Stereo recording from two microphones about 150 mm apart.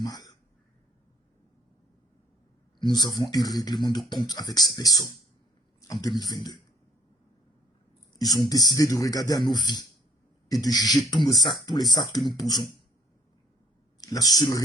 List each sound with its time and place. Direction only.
0.0 s a sound: 25° left (ahead or behind)
2.7 s speech: 30° left (ahead or behind)
5.9 s speech: 25° left (ahead or behind)
8.2 s speech: 25° left (ahead or behind)
14.0 s speech: 25° left (ahead or behind)